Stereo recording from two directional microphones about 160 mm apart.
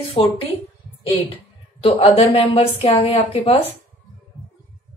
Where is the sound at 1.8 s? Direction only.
35° left (ahead or behind).